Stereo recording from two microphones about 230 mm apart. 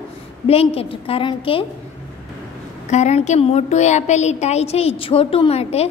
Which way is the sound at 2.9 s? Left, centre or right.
Left.